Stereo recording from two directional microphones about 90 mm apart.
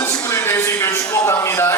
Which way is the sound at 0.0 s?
30° left (ahead or behind).